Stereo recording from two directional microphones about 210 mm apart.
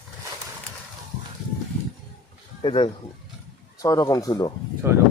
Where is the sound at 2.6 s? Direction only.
25° left (ahead or behind).